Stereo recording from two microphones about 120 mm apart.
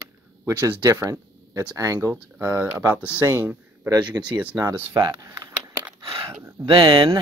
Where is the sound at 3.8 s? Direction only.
30° right (ahead or behind).